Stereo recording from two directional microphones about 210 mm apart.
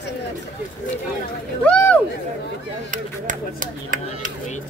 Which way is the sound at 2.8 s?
40° right (ahead or behind).